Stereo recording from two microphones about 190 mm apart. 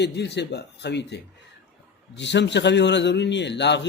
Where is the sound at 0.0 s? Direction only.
65° left (ahead or behind).